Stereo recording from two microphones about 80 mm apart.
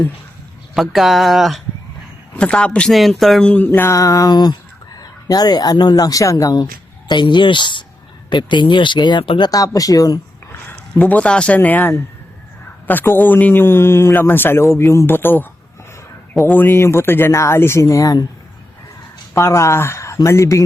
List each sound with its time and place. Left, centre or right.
0.7 s speech: centre
2.4 s a man's voice: centre
2.9 s speech: centre
3.7 s a sound: left
4.9 s speech: left
7.1 s speech: left
9.5 s a sound: left
10.7 s speech: left
16.5 s speech: left
19.3 s speech: left